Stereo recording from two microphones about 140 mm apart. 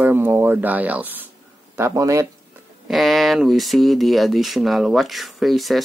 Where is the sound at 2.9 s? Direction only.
Centre (ahead or behind).